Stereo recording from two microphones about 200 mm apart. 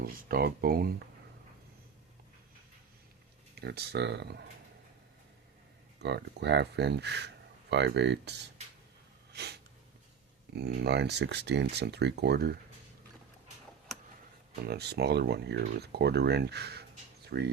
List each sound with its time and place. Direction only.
0.0 s speech: 50° right (ahead or behind)
3.5 s speech: 55° right (ahead or behind)
6.0 s speech: 55° right (ahead or behind)
9.3 s sneeze: 55° right (ahead or behind)
10.5 s speech: 55° right (ahead or behind)
14.7 s speech: 55° right (ahead or behind)